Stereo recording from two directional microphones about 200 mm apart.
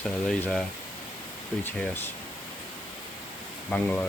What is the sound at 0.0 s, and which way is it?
Speech, centre (ahead or behind).